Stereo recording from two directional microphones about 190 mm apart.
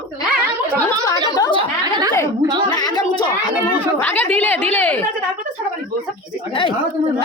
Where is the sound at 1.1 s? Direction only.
20° left (ahead or behind).